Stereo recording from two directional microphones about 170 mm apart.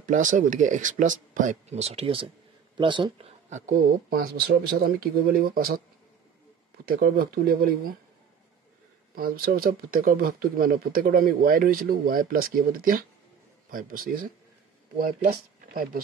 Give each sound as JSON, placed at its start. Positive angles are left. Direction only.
{"t": 0.0, "sound": "speech", "side_deg": -50}
{"t": 4.1, "sound": "speech", "side_deg": -65}
{"t": 6.9, "sound": "speech", "side_deg": -55}
{"t": 9.1, "sound": "speech", "side_deg": -60}